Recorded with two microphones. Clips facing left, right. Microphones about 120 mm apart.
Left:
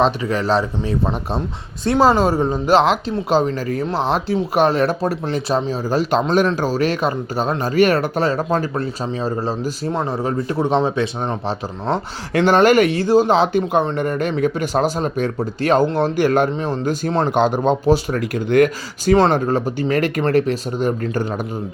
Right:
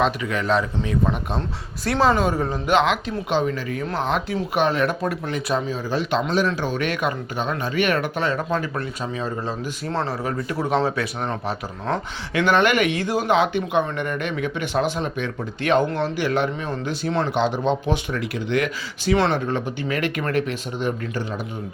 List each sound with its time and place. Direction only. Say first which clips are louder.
0.0 s speech: left 4 dB; 35° left (ahead or behind)
9.9 s speech: left 1 dB; 15° left (ahead or behind)
10.2 s speech: left 5 dB; 30° left (ahead or behind)
12.3 s speech: left 6 dB; 40° left (ahead or behind)
16.5 s speech: left 6 dB; 35° left (ahead or behind)